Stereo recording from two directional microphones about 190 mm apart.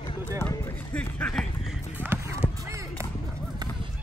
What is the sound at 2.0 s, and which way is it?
Music, 10° right (ahead or behind).